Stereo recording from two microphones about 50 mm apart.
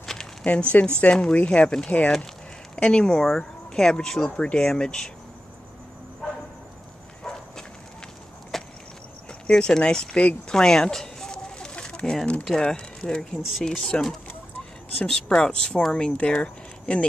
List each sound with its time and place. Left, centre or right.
0.0 s a sound: centre
0.5 s speech: left
7.2 s clip-clop: centre
8.5 s wood: centre
9.5 s speech: centre
10.5 s chicken: centre
12.4 s speech: centre